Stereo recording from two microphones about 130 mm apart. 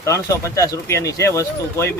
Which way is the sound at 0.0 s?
25° left (ahead or behind).